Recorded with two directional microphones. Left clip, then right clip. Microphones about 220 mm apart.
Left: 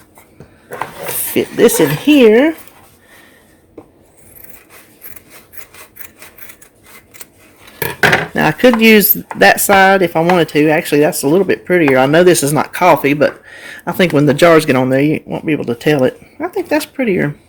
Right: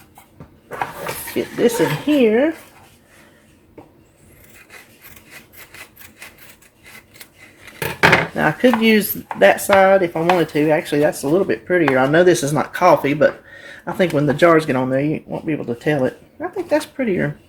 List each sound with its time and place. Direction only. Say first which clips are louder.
1.4 s speech: left 7 dB; 50° left (ahead or behind)
8.4 s speech: left 5 dB; 45° left (ahead or behind)